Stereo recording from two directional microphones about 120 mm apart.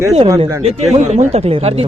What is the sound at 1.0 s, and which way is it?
Speech, 70° right (ahead or behind).